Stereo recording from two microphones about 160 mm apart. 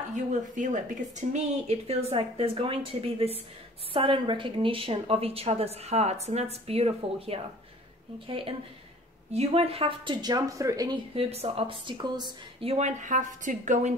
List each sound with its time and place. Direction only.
0.1 s speech: 50° right (ahead or behind)
1.3 s speech: 40° right (ahead or behind); by 11.0 s 20° right (ahead or behind)
11.1 s speech: 40° right (ahead or behind)